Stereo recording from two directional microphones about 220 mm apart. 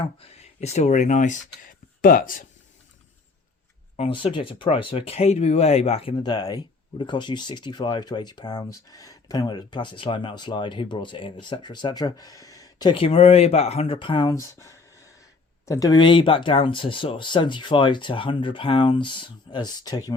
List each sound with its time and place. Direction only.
0.2 s speech: 30° left (ahead or behind)
3.9 s speech: 25° left (ahead or behind)